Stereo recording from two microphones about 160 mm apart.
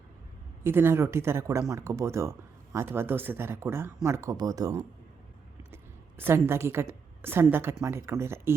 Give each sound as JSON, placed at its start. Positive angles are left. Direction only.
{"t": 0.6, "sound": "a woman's voice", "side_deg": -15}